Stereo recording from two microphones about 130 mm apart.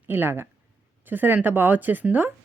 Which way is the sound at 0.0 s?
15° right (ahead or behind).